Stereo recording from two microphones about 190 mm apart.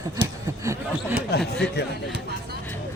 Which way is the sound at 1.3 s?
55° left (ahead or behind).